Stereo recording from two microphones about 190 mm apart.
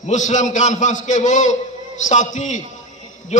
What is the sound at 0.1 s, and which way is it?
A man's voice, 40° left (ahead or behind).